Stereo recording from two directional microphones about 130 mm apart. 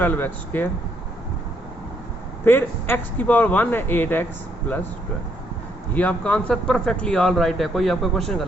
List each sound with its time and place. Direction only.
0.0 s speech: 15° left (ahead or behind)
2.4 s speech: 15° left (ahead or behind)
5.9 s speech: 10° left (ahead or behind)